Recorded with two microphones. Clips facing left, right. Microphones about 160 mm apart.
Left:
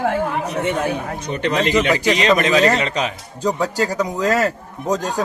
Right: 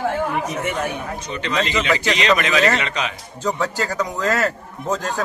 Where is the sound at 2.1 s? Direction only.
45° left (ahead or behind).